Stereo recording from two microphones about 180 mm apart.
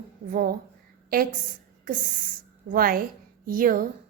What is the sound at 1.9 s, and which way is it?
A woman's voice, 50° right (ahead or behind).